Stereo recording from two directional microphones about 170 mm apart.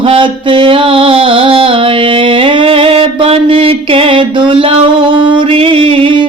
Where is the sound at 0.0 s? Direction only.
30° right (ahead or behind).